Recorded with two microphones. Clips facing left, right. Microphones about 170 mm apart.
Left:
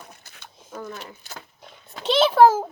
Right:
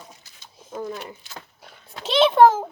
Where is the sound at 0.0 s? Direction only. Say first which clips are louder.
Left 1 dB; 55° left (ahead or behind).